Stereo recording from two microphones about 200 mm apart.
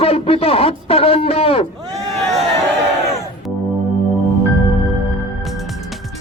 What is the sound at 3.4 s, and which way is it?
Music, centre (ahead or behind).